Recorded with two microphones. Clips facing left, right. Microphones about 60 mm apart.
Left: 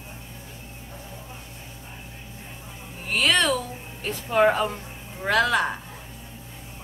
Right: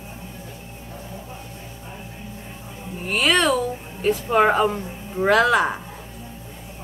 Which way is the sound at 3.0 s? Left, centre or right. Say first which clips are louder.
Right 3 dB; centre.